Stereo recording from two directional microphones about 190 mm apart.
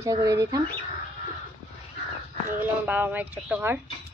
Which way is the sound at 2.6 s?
10° right (ahead or behind).